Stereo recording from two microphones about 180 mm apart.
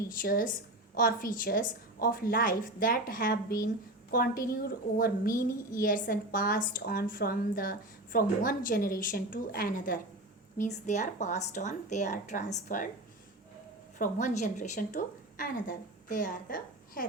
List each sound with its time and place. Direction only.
0.1 s speech: 50° left (ahead or behind)
14.0 s speech: 40° left (ahead or behind)